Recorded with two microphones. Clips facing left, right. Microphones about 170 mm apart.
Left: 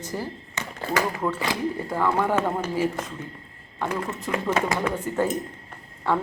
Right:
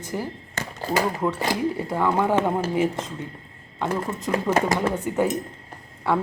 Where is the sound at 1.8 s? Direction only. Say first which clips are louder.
Right 1 dB; 15° right (ahead or behind).